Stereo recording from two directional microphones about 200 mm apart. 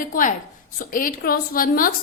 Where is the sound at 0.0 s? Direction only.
45° left (ahead or behind).